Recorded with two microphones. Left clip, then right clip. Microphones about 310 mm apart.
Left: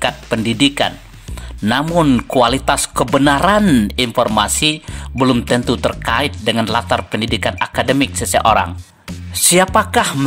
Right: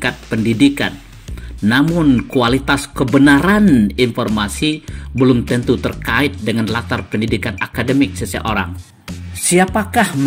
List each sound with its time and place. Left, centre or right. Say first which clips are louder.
0.0 s speech: left 1 dB; left